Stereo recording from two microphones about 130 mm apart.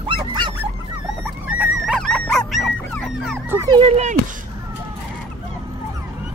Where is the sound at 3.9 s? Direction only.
55° right (ahead or behind).